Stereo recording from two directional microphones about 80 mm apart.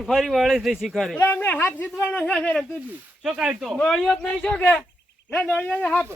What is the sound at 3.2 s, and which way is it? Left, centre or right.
Speech, centre.